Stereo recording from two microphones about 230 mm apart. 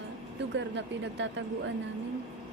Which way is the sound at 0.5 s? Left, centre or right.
Right.